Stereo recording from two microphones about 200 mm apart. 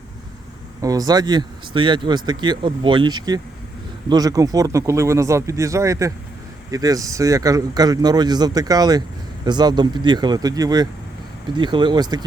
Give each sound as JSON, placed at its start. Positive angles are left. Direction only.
{"t": 0.8, "sound": "speech", "side_deg": -15}